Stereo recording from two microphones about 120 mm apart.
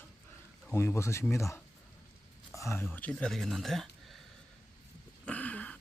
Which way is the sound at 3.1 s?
5° left (ahead or behind).